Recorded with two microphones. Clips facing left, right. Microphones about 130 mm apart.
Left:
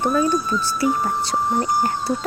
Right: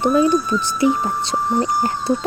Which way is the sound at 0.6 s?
20° right (ahead or behind).